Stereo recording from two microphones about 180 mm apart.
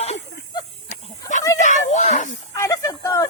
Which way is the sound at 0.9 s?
40° left (ahead or behind).